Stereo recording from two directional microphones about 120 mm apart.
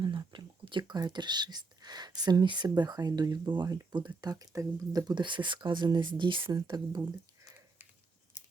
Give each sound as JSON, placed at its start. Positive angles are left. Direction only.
{"t": 0.0, "sound": "speech", "side_deg": -40}